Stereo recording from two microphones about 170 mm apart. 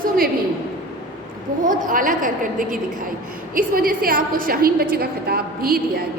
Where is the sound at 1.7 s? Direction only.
50° right (ahead or behind).